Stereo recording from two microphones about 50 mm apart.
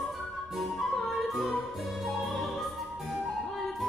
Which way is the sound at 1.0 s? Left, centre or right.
Centre.